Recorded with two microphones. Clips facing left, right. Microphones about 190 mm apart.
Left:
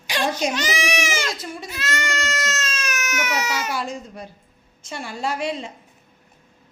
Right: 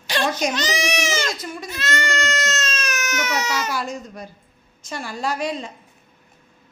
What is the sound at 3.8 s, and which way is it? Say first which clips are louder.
A woman's voice: even; 30° left (ahead or behind).